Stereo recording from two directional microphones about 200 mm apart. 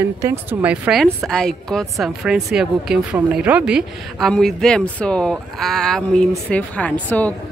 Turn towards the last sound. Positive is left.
turn(degrees=5)  # may be behind; listen again after turning